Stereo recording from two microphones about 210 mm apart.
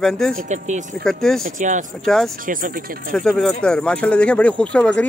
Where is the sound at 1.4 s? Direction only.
35° right (ahead or behind).